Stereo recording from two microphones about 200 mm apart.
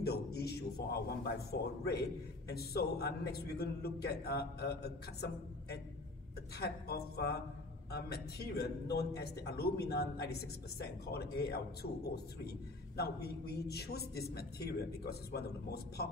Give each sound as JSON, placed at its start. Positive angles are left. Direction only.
{"t": 0.0, "sound": "a man's voice", "side_deg": 55}